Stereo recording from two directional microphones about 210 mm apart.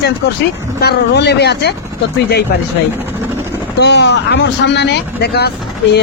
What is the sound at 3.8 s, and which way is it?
Speech, 55° left (ahead or behind).